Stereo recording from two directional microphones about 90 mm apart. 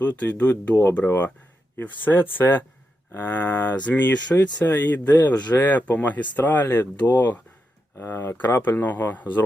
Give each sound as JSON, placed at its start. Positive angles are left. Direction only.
{"t": 0.0, "sound": "speech", "side_deg": 15}